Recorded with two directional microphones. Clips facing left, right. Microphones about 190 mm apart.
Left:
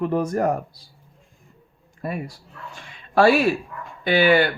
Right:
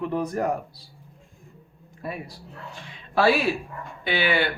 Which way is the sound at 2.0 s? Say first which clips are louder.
Left 4 dB; 50° left (ahead or behind).